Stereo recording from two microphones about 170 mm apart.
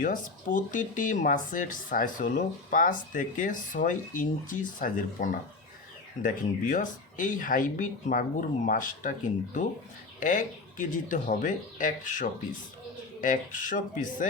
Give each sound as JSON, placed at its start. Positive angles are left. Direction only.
{"t": 0.0, "sound": "speech", "side_deg": 50}
{"t": 10.2, "sound": "speech", "side_deg": 50}